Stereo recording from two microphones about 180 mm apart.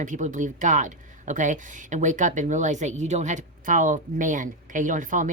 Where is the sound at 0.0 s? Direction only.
45° right (ahead or behind).